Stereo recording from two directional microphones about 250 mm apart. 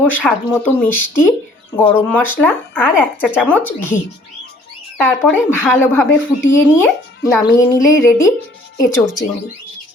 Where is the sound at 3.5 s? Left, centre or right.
Centre.